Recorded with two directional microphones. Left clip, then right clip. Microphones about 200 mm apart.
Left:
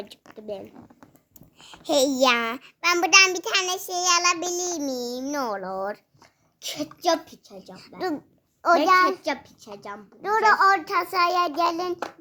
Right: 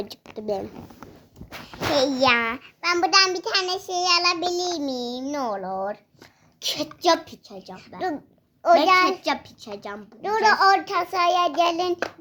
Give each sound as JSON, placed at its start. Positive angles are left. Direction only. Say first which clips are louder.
{"t": 0.3, "sound": "speech", "louder": "right 7 dB", "side_deg": -40}
{"t": 1.6, "sound": "a child's voice", "louder": "even", "side_deg": 55}
{"t": 3.4, "sound": "child singing", "louder": "even", "side_deg": 45}
{"t": 6.6, "sound": "a child's voice", "louder": "right 5 dB", "side_deg": -30}
{"t": 7.9, "sound": "child singing", "louder": "right 1 dB", "side_deg": 40}
{"t": 9.2, "sound": "a child's voice", "louder": "right 3 dB", "side_deg": -30}
{"t": 10.2, "sound": "a child's voice", "louder": "even", "side_deg": 10}
{"t": 10.8, "sound": "child singing", "louder": "right 1 dB", "side_deg": 25}